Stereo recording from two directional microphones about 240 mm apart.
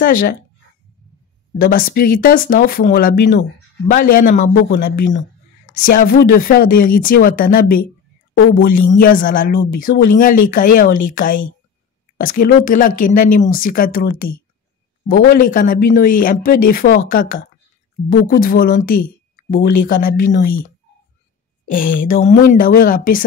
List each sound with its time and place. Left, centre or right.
0.0 s speech: left
1.6 s speech: left
21.6 s speech: left